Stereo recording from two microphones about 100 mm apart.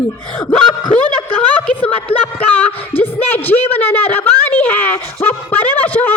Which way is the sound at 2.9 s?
20° left (ahead or behind).